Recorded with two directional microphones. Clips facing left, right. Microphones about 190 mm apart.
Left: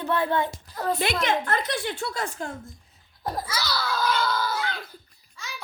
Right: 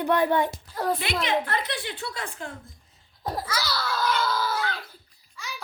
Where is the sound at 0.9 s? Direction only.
45° left (ahead or behind).